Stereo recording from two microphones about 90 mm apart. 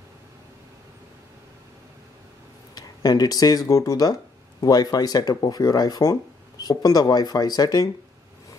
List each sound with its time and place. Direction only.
2.7 s speech: 45° left (ahead or behind)